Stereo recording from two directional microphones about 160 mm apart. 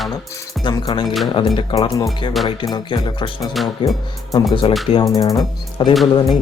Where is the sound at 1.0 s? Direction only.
Centre (ahead or behind).